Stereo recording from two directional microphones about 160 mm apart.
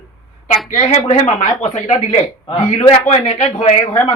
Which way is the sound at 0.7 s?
45° left (ahead or behind).